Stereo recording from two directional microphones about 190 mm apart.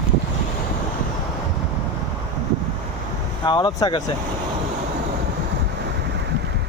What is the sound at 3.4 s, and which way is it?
Speech, 25° left (ahead or behind).